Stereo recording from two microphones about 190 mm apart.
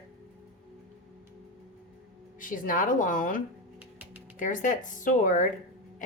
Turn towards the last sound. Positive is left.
turn(degrees=40)  # may be behind; listen again after turning